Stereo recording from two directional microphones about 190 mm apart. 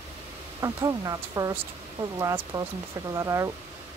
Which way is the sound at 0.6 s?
15° right (ahead or behind).